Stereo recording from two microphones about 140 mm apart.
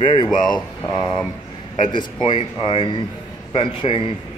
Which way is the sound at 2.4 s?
40° left (ahead or behind).